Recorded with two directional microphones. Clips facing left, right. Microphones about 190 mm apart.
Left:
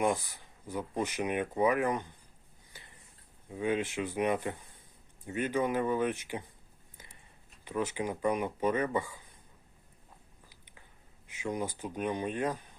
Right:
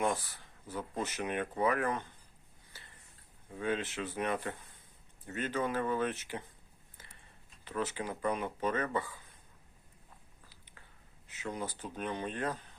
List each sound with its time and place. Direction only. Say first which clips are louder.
0.0 s speech: left 3 dB; 15° left (ahead or behind)
2.7 s a sound: left 3 dB; 15° left (ahead or behind)
3.5 s speech: left 4 dB; 15° left (ahead or behind)
7.6 s speech: left 3 dB; 15° left (ahead or behind)
10.5 s a sound: left 1 dB; 15° left (ahead or behind)
11.3 s speech: left 4 dB; 15° left (ahead or behind)